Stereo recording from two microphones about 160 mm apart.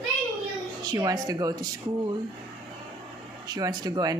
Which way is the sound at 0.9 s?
25° right (ahead or behind).